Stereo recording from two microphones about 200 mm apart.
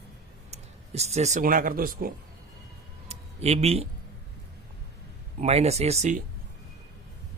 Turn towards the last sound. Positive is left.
turn(degrees=-35)  # may be behind; listen again after turning